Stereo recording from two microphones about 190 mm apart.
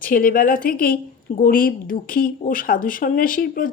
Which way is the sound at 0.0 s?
45° left (ahead or behind).